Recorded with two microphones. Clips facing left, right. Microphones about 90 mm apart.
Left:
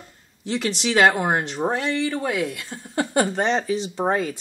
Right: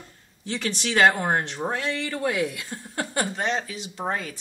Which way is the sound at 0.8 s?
5° left (ahead or behind).